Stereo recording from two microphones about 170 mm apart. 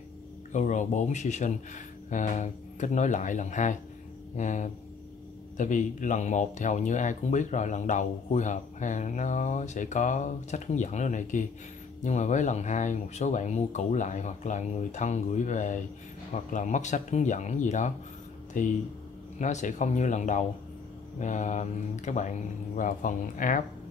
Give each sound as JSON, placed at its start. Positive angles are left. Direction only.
{"t": 0.5, "sound": "speech", "side_deg": 45}